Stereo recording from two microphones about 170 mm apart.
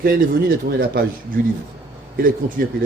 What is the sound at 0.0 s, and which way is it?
A man's voice, 60° right (ahead or behind).